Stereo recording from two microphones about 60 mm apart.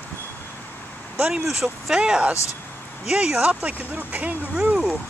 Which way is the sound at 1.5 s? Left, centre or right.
Centre.